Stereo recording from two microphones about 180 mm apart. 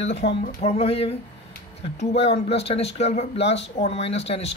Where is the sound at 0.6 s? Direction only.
35° left (ahead or behind).